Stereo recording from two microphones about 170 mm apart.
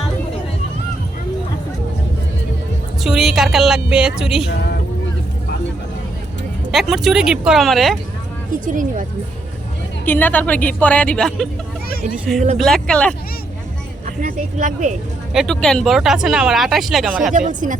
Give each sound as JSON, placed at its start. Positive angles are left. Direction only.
{"t": 3.0, "sound": "speech", "side_deg": -5}
{"t": 6.7, "sound": "speech", "side_deg": 0}
{"t": 8.6, "sound": "speech", "side_deg": -50}
{"t": 10.1, "sound": "a woman's voice", "side_deg": 10}
{"t": 12.5, "sound": "speech", "side_deg": 5}
{"t": 14.2, "sound": "speech", "side_deg": -50}
{"t": 15.3, "sound": "speech", "side_deg": 0}
{"t": 17.3, "sound": "speech", "side_deg": -50}